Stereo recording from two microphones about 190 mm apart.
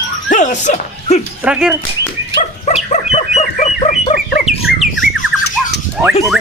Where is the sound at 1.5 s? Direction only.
5° right (ahead or behind).